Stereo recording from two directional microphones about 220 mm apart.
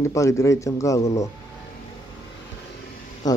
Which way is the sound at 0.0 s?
15° left (ahead or behind).